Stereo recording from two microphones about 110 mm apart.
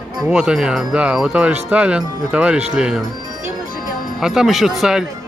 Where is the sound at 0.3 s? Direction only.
5° right (ahead or behind).